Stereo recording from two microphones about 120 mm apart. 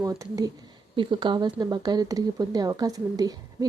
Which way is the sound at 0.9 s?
40° right (ahead or behind).